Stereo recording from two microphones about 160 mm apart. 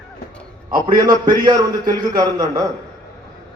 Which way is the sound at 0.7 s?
25° right (ahead or behind).